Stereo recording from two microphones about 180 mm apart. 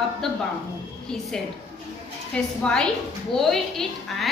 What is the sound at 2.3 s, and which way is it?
A woman's voice, 5° left (ahead or behind).